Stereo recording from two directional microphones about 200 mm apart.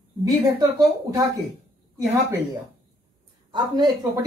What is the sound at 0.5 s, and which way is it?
Speech, 20° right (ahead or behind).